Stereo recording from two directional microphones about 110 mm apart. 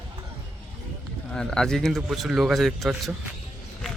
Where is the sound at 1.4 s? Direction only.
5° left (ahead or behind).